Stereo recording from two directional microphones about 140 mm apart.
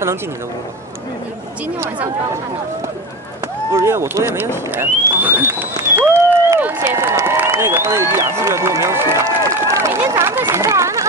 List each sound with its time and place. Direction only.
3.7 s speech: 20° right (ahead or behind)